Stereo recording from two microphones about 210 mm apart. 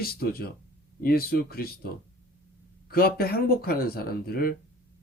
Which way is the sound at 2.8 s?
45° left (ahead or behind).